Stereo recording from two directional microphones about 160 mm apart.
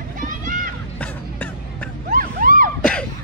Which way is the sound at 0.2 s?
55° right (ahead or behind).